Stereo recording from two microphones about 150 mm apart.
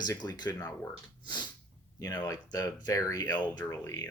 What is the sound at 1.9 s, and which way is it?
Speech, 25° left (ahead or behind).